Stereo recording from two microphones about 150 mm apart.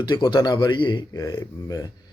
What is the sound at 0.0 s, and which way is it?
Speech, 30° left (ahead or behind).